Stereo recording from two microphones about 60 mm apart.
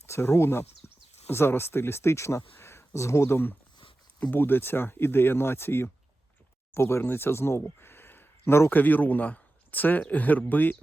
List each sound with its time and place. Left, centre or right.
0.1 s speech: left
0.8 s a sound: left
1.3 s speech: left